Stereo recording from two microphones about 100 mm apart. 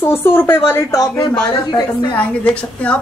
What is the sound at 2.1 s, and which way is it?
Speech, 15° left (ahead or behind).